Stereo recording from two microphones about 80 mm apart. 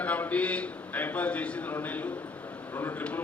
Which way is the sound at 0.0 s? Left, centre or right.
Centre.